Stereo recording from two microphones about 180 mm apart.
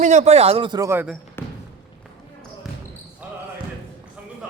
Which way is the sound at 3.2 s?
10° right (ahead or behind).